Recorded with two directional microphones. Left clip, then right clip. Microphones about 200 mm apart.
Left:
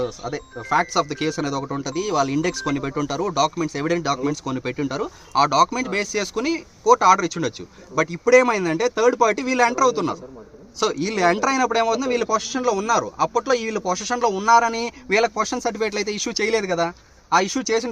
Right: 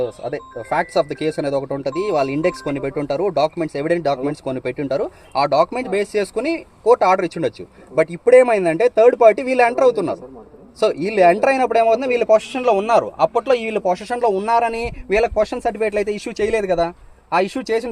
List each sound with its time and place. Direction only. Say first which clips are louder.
0.0 s speech: right 3 dB; 30° left (ahead or behind)